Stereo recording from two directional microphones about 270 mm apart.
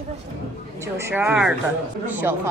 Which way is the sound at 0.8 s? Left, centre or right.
Centre.